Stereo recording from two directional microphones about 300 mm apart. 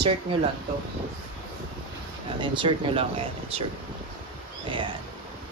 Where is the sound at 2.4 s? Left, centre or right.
Centre.